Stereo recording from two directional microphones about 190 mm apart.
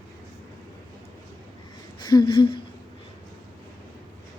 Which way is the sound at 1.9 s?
20° left (ahead or behind).